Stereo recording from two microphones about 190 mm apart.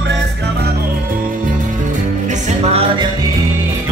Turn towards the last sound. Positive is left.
turn(degrees=-30)  # may be behind; listen again after turning